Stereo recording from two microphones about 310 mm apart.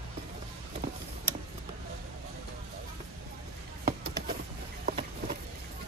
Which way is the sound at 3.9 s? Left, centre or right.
Right.